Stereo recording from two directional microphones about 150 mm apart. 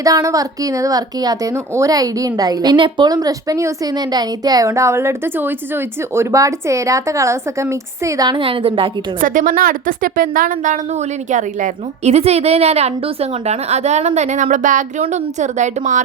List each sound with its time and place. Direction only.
0.0 s speech: 25° right (ahead or behind)
9.2 s a woman's voice: 65° right (ahead or behind)